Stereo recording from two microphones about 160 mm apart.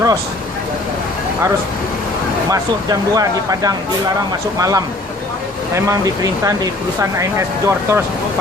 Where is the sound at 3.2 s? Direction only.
25° right (ahead or behind).